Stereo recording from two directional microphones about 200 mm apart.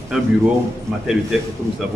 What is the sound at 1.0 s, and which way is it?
Speech, 5° right (ahead or behind).